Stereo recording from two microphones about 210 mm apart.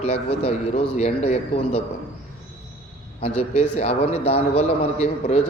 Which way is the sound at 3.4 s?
30° left (ahead or behind).